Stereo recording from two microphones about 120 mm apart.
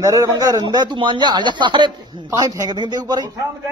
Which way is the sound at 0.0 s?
30° right (ahead or behind).